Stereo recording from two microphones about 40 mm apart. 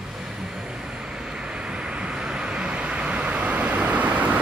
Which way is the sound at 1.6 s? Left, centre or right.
Right.